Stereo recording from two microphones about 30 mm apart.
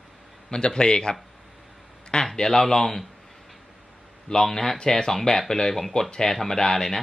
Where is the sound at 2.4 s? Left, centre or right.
Centre.